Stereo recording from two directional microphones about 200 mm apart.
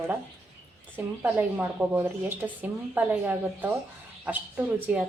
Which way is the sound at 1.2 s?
10° right (ahead or behind).